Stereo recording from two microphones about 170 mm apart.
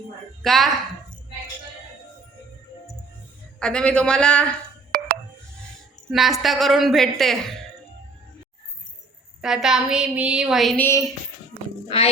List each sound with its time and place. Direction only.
0.4 s a woman's voice: centre (ahead or behind)
3.6 s a woman's voice: 5° left (ahead or behind)
6.1 s a woman's voice: centre (ahead or behind)
9.4 s a woman's voice: 5° right (ahead or behind)
10.8 s a sound: 20° left (ahead or behind)
11.9 s music: 35° left (ahead or behind)